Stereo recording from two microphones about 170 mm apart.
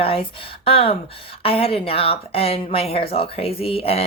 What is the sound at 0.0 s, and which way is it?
Speech, 35° left (ahead or behind).